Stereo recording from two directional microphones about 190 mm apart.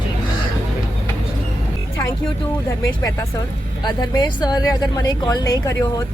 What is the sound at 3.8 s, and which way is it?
A man's voice, 20° left (ahead or behind).